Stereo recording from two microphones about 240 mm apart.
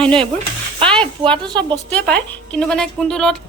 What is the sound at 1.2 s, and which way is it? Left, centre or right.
Speech, centre.